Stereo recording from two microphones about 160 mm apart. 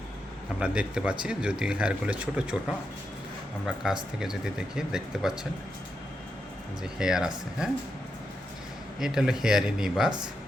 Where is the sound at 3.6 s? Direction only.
5° right (ahead or behind).